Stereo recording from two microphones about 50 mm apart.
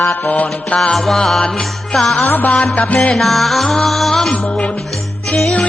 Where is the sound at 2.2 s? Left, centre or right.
Left.